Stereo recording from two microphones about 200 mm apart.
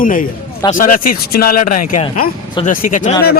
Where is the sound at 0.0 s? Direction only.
45° left (ahead or behind).